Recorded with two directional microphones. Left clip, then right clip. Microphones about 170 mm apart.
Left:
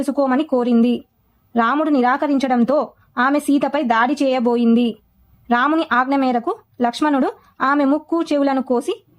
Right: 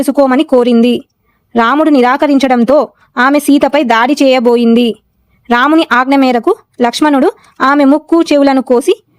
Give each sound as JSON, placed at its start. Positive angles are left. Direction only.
{"t": 0.0, "sound": "speech", "side_deg": -45}